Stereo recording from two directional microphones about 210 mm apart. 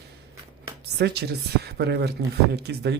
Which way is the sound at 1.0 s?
50° right (ahead or behind).